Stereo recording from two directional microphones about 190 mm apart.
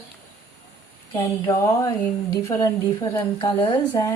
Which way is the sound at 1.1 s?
15° left (ahead or behind).